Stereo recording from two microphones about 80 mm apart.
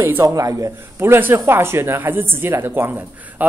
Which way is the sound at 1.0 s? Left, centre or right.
Right.